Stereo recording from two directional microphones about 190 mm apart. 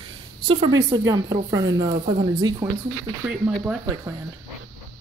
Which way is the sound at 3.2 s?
5° right (ahead or behind).